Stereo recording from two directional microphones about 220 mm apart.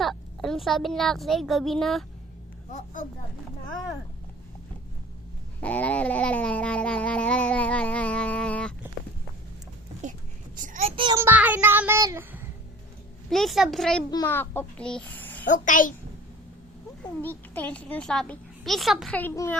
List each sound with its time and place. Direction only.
0.0 s a woman's voice: centre (ahead or behind)
2.7 s a child's voice: 35° left (ahead or behind)
5.5 s a sound: 5° left (ahead or behind)
10.0 s a sound: 35° right (ahead or behind)
10.6 s child singing: 30° right (ahead or behind)
11.2 s child singing: 10° right (ahead or behind)
13.3 s a sound: centre (ahead or behind)
14.1 s a child's voice: 15° left (ahead or behind)
15.4 s a child's voice: 35° left (ahead or behind)
17.2 s a child's voice: 10° left (ahead or behind)